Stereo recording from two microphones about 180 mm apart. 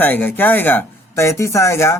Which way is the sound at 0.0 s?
10° left (ahead or behind).